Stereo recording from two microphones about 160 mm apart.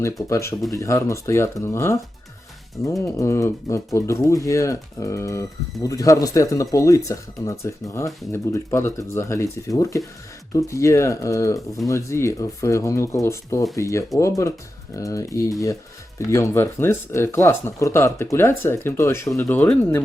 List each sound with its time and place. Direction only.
0.0 s speech: 20° left (ahead or behind)
3.0 s speech: 15° left (ahead or behind)